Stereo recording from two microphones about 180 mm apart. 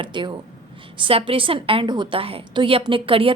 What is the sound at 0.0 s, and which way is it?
A woman's voice, 25° right (ahead or behind).